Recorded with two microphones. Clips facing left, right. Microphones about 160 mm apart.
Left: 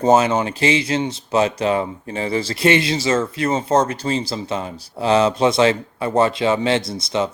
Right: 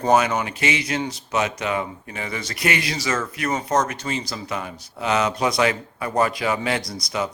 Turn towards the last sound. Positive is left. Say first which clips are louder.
# left 5 dB
turn(degrees=25)  # may be behind; listen again after turning